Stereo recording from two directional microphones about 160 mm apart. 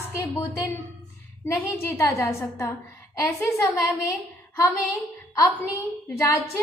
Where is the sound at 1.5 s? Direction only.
20° left (ahead or behind).